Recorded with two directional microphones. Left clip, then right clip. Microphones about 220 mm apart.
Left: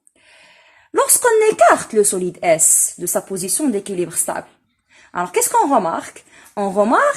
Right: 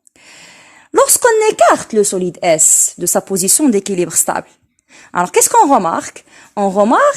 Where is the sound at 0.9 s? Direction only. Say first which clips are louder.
Right 4 dB; 45° right (ahead or behind).